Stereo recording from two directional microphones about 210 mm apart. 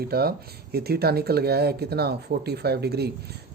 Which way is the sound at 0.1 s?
45° right (ahead or behind).